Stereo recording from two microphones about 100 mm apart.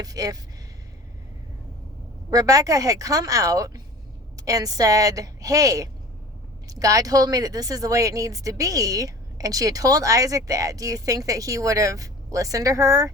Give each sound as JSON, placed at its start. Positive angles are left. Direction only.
{"t": 0.0, "sound": "speech", "side_deg": -40}
{"t": 2.3, "sound": "a woman's voice", "side_deg": -35}